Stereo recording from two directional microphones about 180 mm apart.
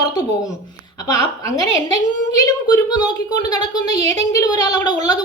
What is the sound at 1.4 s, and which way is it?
A woman's voice, 20° left (ahead or behind).